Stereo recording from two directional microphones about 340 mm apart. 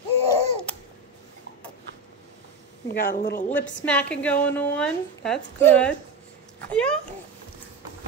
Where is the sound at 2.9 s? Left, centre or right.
Left.